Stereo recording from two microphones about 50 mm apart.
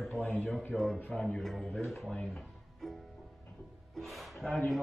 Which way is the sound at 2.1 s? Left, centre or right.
Centre.